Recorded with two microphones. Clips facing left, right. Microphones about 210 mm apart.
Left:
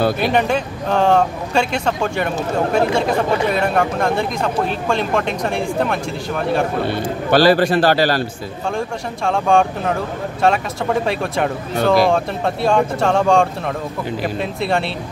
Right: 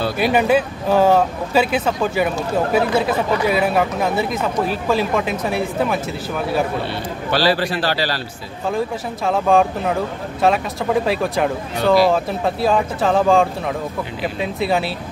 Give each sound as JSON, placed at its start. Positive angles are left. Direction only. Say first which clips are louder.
{"t": 0.2, "sound": "speech", "louder": "right 2 dB", "side_deg": -5}
{"t": 6.9, "sound": "a man's voice", "louder": "left 5 dB", "side_deg": 50}
{"t": 8.6, "sound": "speech", "louder": "right 2 dB", "side_deg": -5}